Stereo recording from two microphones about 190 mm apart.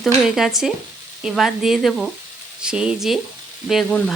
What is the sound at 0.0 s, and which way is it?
Speech, centre (ahead or behind).